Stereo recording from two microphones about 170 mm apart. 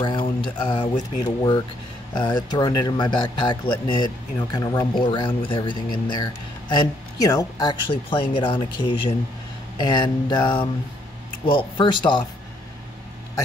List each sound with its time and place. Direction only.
0.0 s speech: 30° left (ahead or behind)